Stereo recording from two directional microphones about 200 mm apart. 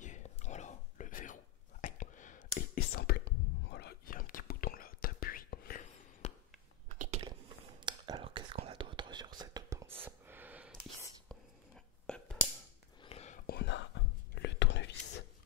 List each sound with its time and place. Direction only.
0.0 s whispering: 35° left (ahead or behind)
2.7 s whispering: 50° left (ahead or behind)
6.2 s a sound: 30° left (ahead or behind)
7.0 s chewing: 35° right (ahead or behind)
7.2 s whispering: 25° right (ahead or behind)
12.1 s a sound: 5° left (ahead or behind)
13.0 s whispering: 30° left (ahead or behind)
13.5 s whispering: 60° left (ahead or behind)